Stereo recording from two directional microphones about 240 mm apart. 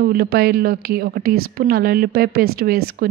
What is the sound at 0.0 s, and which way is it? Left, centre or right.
A woman's voice, right.